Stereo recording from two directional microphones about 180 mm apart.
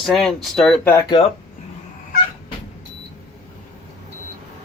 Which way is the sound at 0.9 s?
20° left (ahead or behind).